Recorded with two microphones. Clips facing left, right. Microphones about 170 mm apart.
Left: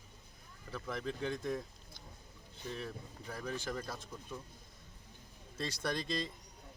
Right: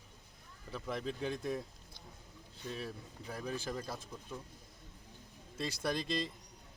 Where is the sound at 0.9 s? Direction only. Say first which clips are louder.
Even; 35° right (ahead or behind).